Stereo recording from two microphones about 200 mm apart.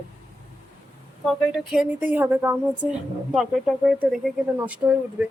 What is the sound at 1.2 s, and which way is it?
A woman's voice, centre (ahead or behind).